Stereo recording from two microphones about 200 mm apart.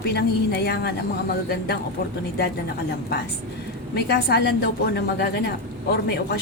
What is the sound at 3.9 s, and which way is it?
Speech, 55° left (ahead or behind).